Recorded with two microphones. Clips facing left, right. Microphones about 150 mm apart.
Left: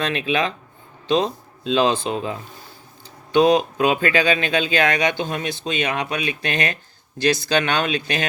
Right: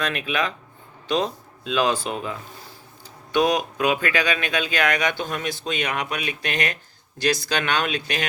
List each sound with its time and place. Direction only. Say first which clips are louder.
0.0 s speech: left 3 dB; 30° left (ahead or behind)